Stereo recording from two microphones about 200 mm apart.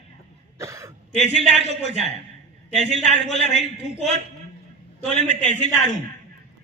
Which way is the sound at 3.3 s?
35° left (ahead or behind).